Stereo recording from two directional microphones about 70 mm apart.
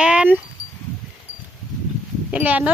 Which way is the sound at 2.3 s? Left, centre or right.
Right.